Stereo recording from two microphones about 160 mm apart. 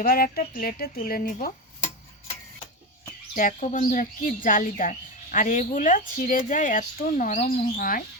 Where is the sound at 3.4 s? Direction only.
55° left (ahead or behind).